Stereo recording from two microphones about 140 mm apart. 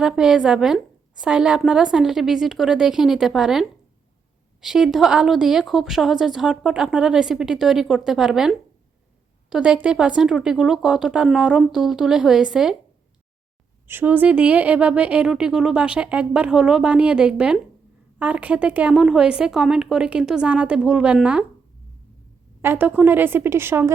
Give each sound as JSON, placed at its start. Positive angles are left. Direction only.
{"t": 0.0, "sound": "a woman's voice", "side_deg": -5}
{"t": 13.8, "sound": "speech", "side_deg": -15}
{"t": 22.6, "sound": "speech", "side_deg": -15}